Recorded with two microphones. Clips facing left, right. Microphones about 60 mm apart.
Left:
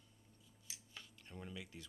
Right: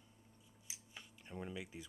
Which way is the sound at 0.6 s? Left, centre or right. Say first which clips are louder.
Even; centre.